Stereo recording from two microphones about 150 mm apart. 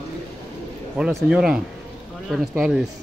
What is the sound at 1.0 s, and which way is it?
Speech, centre (ahead or behind).